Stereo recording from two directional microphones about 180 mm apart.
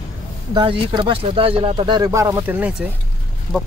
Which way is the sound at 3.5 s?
5° left (ahead or behind).